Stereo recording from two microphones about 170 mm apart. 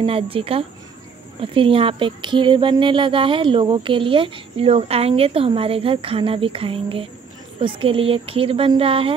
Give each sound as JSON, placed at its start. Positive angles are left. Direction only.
{"t": 0.0, "sound": "speech", "side_deg": -35}